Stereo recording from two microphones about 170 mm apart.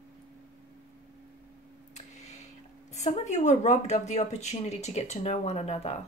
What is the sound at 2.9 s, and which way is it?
Speech, 45° left (ahead or behind).